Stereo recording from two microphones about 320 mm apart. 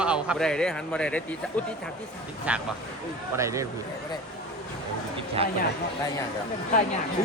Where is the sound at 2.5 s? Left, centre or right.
Centre.